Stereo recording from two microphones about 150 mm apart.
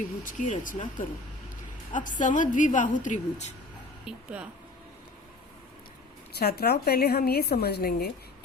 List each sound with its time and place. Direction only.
0.3 s a woman's voice: 55° left (ahead or behind)
4.0 s speech: 5° right (ahead or behind)
6.4 s a woman's voice: 90° left